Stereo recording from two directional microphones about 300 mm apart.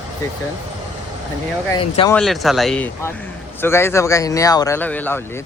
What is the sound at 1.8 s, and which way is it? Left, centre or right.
Speech, centre.